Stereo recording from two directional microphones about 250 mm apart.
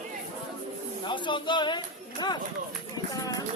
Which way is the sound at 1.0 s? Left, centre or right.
Centre.